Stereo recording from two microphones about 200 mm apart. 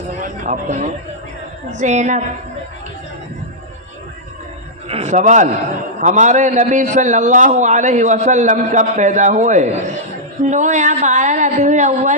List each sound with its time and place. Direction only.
0.2 s a sound: 40° right (ahead or behind)
1.8 s a man's voice: 35° right (ahead or behind)
4.9 s a man's voice: 30° right (ahead or behind)